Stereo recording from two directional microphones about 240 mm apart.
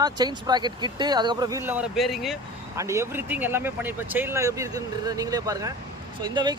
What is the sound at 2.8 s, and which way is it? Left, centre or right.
Speech, centre.